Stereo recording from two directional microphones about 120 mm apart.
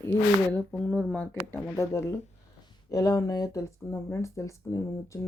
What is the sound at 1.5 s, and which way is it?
Speech, 25° left (ahead or behind).